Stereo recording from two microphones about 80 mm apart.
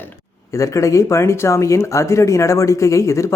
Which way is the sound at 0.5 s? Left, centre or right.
Left.